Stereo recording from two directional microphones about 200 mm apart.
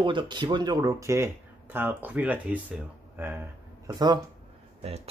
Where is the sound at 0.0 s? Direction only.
25° right (ahead or behind).